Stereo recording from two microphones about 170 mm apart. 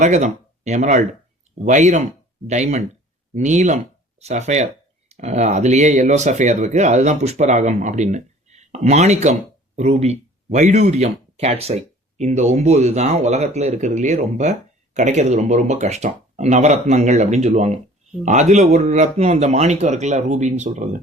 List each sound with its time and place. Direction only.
0.0 s speech: 45° right (ahead or behind)